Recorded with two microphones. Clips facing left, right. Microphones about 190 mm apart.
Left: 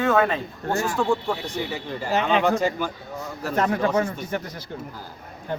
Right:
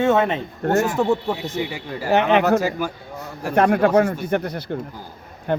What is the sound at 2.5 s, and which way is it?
Speech, 5° right (ahead or behind).